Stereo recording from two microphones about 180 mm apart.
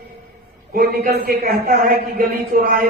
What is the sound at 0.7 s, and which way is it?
A man's voice, 55° right (ahead or behind).